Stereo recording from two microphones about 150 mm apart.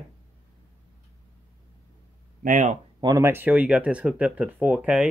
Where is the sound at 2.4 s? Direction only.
55° right (ahead or behind).